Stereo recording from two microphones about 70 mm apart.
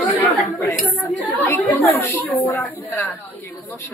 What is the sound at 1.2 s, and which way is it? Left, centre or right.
Speech, left.